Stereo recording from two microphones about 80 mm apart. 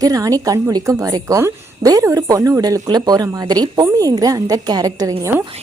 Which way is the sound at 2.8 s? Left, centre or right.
Right.